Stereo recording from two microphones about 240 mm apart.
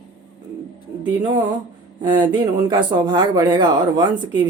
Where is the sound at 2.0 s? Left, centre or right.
Centre.